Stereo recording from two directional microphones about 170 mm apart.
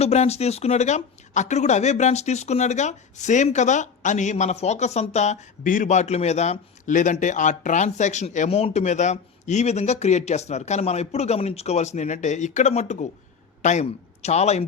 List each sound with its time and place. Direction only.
0.0 s a man's voice: 40° left (ahead or behind)